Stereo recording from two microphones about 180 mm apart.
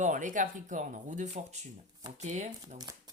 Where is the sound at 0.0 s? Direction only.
45° right (ahead or behind).